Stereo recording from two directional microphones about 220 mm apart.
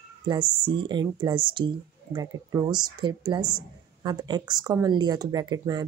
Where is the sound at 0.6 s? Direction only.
20° right (ahead or behind).